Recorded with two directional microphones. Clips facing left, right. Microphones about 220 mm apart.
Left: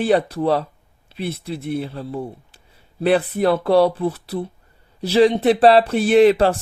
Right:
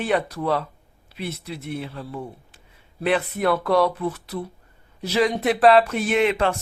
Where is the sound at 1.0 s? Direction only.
30° left (ahead or behind).